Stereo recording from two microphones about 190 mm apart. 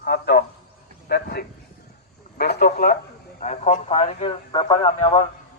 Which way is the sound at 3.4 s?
40° left (ahead or behind).